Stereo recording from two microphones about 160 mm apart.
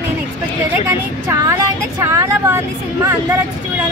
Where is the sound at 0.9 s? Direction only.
20° right (ahead or behind).